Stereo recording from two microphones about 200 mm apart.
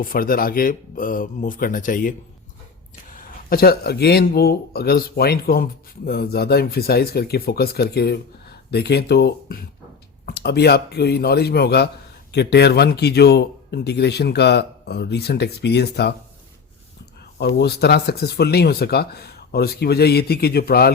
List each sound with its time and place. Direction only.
0.0 s a man's voice: 45° left (ahead or behind)
17.3 s speech: 55° left (ahead or behind)